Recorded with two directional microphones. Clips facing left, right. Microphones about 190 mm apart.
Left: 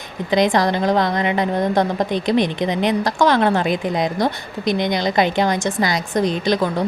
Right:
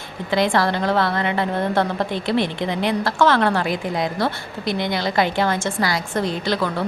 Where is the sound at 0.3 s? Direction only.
20° left (ahead or behind).